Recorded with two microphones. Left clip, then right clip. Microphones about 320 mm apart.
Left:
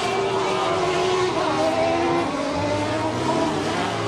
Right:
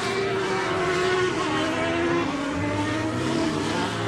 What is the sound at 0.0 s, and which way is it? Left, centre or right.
Vehicle, centre.